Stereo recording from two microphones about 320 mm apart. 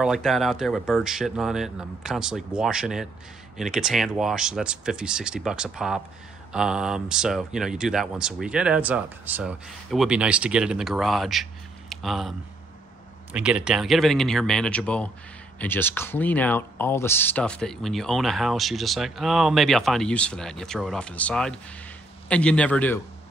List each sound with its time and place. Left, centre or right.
0.0 s speech: centre